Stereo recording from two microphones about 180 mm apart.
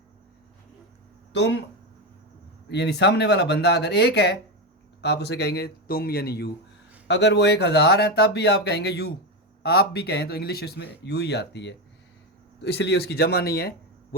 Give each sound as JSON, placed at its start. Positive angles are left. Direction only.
{"t": 1.3, "sound": "speech", "side_deg": 75}
{"t": 2.6, "sound": "speech", "side_deg": 70}
{"t": 7.1, "sound": "speech", "side_deg": 70}